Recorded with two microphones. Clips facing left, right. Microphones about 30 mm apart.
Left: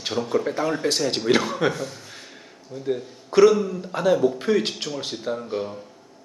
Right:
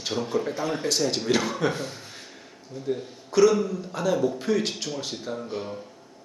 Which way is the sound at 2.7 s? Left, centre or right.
Centre.